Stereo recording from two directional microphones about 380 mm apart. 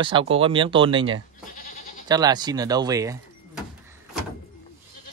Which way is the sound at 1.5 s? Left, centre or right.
Left.